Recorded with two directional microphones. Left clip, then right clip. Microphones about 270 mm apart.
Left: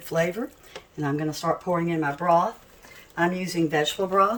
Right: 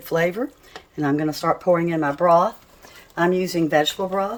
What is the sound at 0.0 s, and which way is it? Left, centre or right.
Speech, centre.